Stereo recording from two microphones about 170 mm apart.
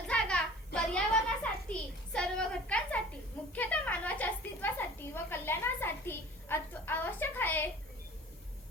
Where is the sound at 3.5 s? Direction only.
10° left (ahead or behind).